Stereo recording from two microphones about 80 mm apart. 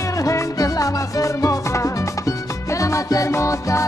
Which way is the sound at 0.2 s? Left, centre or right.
Left.